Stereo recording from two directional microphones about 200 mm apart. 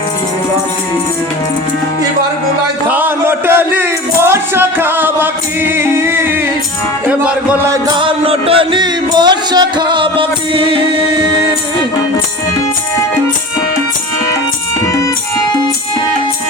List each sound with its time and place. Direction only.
2.9 s music: 10° right (ahead or behind)
7.7 s music: 20° right (ahead or behind)